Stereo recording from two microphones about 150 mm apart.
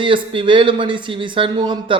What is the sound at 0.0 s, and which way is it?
Speech, 35° right (ahead or behind).